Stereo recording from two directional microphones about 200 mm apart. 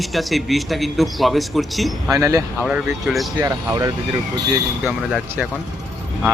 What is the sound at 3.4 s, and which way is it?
Speech, 20° right (ahead or behind).